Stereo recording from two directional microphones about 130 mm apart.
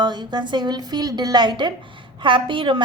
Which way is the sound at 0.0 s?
35° right (ahead or behind).